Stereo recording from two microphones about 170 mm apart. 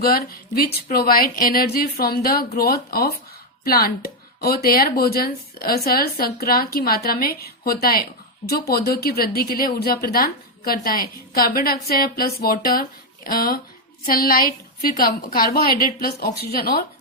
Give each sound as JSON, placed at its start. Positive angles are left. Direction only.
{"t": 0.0, "sound": "speech", "side_deg": 65}